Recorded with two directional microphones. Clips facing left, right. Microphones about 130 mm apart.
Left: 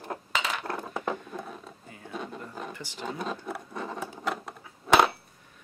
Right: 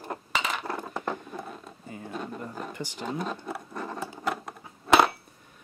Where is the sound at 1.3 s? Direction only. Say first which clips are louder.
Even; centre (ahead or behind).